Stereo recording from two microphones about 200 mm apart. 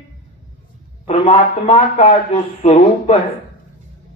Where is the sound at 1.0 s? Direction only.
35° left (ahead or behind).